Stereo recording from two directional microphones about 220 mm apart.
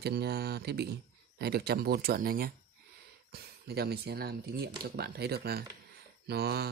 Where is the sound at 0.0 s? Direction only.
45° right (ahead or behind).